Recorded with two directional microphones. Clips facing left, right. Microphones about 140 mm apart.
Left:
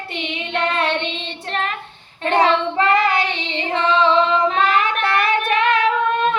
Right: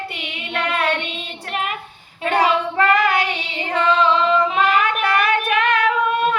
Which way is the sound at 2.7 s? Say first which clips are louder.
Even; 20° left (ahead or behind).